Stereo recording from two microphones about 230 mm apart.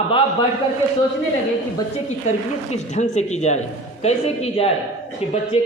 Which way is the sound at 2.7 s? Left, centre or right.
Left.